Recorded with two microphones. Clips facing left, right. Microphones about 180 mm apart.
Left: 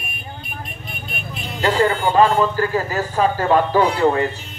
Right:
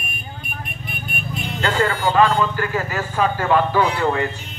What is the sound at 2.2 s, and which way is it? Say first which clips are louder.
A man's voice: left 2 dB; 35° left (ahead or behind).